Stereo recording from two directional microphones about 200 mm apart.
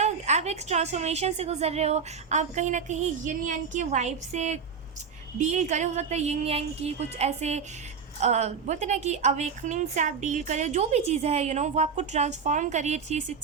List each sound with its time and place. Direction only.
0.0 s a woman's voice: 35° right (ahead or behind)